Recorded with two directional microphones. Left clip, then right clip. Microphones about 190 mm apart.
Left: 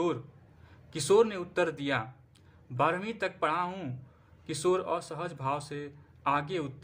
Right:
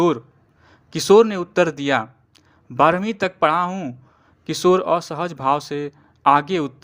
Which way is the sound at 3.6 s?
20° right (ahead or behind).